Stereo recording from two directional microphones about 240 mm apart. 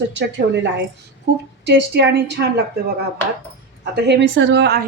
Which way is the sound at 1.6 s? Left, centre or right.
Right.